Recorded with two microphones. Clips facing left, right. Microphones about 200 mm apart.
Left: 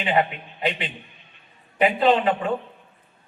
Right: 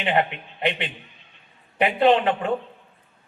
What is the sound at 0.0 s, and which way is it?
A man's voice, 60° right (ahead or behind).